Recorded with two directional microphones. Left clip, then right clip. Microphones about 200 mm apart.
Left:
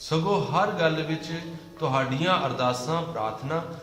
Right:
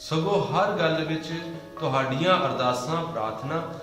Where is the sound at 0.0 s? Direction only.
20° left (ahead or behind).